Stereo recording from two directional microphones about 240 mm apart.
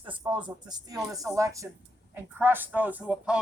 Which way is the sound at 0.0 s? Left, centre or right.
Centre.